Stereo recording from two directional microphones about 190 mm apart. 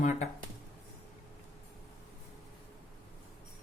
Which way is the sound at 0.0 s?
35° left (ahead or behind).